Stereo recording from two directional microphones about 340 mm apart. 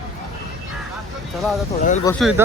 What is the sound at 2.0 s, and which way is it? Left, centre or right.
Speech, centre.